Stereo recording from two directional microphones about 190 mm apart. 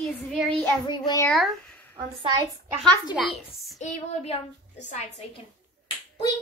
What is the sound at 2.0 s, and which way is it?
Speech, 25° right (ahead or behind).